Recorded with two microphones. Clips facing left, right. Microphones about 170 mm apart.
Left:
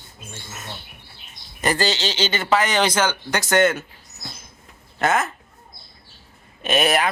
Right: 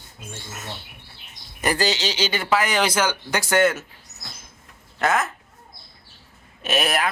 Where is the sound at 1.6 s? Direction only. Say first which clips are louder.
Left 1 dB; 10° right (ahead or behind).